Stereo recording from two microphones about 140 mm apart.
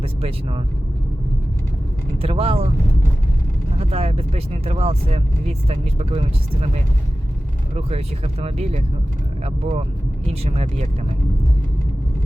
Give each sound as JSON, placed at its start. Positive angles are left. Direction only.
{"t": 0.0, "sound": "speech", "side_deg": -45}
{"t": 2.1, "sound": "speech", "side_deg": -45}
{"t": 3.8, "sound": "speech", "side_deg": -45}
{"t": 7.8, "sound": "speech", "side_deg": -45}